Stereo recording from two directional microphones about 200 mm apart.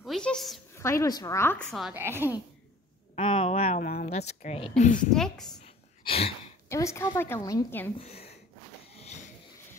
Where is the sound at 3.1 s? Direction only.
30° left (ahead or behind).